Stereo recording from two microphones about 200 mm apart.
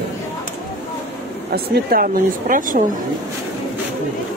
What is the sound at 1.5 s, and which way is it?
Speech, 50° right (ahead or behind).